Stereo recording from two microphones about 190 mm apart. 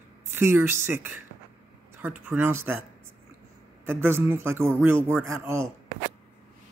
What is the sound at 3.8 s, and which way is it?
Speech, 10° right (ahead or behind).